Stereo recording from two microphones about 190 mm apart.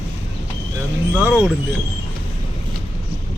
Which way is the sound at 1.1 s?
Centre (ahead or behind).